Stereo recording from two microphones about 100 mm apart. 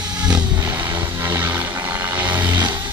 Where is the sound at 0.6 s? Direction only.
25° right (ahead or behind).